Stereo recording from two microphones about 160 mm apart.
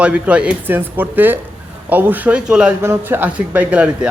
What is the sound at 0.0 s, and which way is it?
Speech, 5° right (ahead or behind).